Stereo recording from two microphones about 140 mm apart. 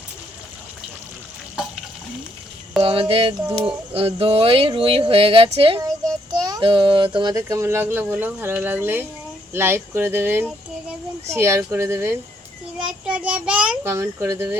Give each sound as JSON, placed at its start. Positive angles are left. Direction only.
{"t": 2.8, "sound": "a child's voice", "side_deg": -40}
{"t": 7.4, "sound": "speech", "side_deg": -20}
{"t": 13.1, "sound": "child singing", "side_deg": -10}
{"t": 13.8, "sound": "speech", "side_deg": -20}